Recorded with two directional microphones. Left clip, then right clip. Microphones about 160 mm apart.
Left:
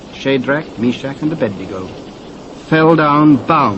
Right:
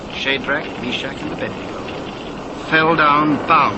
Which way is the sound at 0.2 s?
45° left (ahead or behind).